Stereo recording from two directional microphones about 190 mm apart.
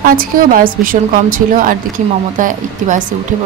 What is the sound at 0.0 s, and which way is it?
A woman's voice, 45° right (ahead or behind).